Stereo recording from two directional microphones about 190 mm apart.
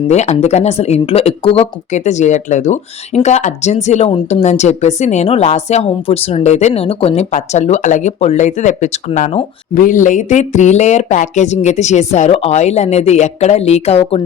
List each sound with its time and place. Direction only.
0.1 s speech: 35° left (ahead or behind)